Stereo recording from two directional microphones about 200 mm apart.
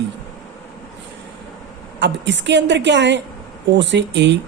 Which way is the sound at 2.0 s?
65° right (ahead or behind).